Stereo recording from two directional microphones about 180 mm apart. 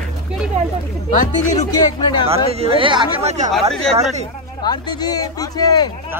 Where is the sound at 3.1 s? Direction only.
40° right (ahead or behind).